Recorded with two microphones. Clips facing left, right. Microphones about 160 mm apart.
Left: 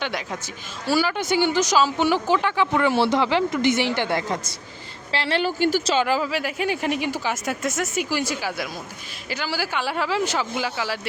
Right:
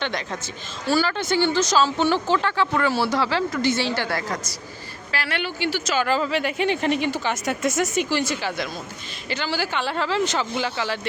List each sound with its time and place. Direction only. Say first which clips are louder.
0.0 s a woman's voice: right 1 dB; 10° left (ahead or behind); by 5.5 s 30° left (ahead or behind)
5.5 s speech: left 5 dB; 45° left (ahead or behind)
5.9 s a woman's voice: left 1 dB; 20° left (ahead or behind)
6.1 s speech: right 2 dB; 5° left (ahead or behind)